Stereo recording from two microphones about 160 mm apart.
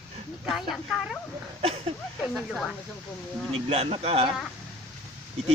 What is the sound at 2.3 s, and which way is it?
Snake, centre (ahead or behind).